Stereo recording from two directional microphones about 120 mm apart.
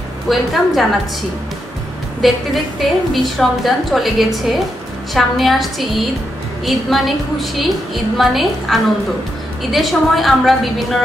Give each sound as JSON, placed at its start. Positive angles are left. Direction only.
{"t": 0.3, "sound": "a woman's voice", "side_deg": 0}
{"t": 2.2, "sound": "a woman's voice", "side_deg": 0}